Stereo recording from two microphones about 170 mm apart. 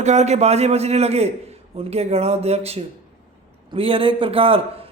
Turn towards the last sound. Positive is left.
turn(degrees=-35)  # may be behind; listen again after turning